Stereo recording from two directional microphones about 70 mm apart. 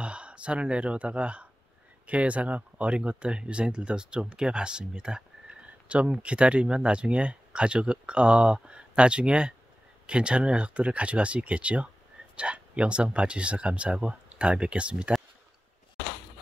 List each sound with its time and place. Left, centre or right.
0.0 s speech: centre